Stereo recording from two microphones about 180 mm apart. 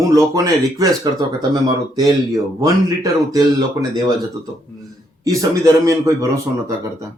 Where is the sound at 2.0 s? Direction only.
20° right (ahead or behind).